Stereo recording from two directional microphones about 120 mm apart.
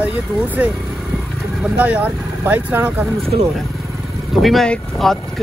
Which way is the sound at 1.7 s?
15° right (ahead or behind).